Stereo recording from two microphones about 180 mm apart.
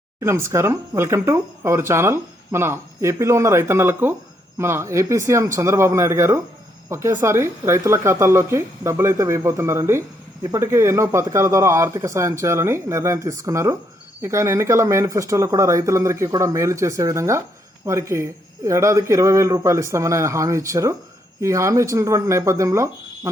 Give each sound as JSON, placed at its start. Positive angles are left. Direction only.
{"t": 0.2, "sound": "speech", "side_deg": -15}